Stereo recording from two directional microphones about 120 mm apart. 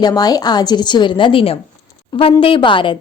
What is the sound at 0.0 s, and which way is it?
A woman's voice, 35° left (ahead or behind).